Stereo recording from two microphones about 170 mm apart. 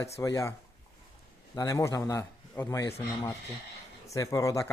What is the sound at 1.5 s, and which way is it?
A man's voice, 20° left (ahead or behind).